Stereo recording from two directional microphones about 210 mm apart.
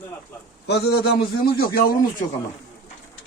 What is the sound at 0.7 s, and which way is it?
A man's voice, 50° left (ahead or behind).